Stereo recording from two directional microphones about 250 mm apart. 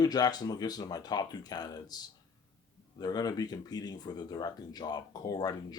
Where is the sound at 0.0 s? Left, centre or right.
Centre.